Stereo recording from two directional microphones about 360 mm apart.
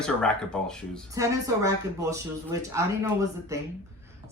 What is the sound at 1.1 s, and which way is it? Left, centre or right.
Speech, centre.